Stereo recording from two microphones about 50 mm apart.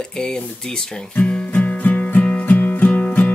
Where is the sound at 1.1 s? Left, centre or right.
Left.